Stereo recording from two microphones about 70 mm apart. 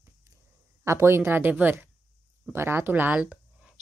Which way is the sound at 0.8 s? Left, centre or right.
Right.